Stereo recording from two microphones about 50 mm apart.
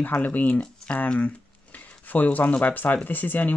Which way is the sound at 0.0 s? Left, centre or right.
Left.